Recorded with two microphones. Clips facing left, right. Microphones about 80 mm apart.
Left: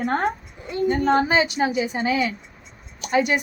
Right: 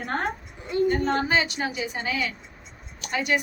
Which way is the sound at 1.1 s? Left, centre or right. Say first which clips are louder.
Left 5 dB; centre.